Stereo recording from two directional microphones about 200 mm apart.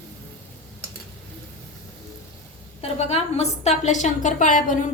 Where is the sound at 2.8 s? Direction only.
30° left (ahead or behind).